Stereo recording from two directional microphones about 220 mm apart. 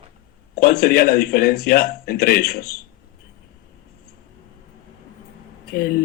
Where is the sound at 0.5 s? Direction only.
45° left (ahead or behind).